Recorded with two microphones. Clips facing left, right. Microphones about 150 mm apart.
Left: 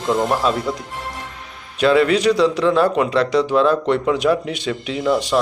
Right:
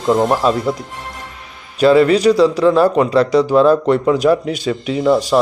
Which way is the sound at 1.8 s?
Centre (ahead or behind).